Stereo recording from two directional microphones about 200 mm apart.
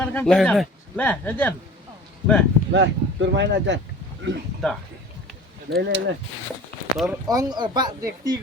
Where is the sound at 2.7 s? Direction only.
60° right (ahead or behind).